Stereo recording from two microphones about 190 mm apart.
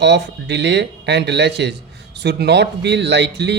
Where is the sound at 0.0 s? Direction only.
65° right (ahead or behind).